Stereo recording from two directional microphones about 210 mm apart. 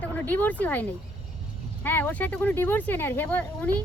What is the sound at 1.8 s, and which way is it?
Speech, 10° left (ahead or behind).